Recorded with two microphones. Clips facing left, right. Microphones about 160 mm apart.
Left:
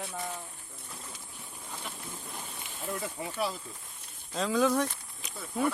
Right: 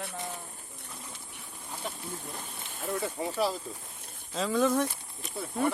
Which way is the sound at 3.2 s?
40° right (ahead or behind).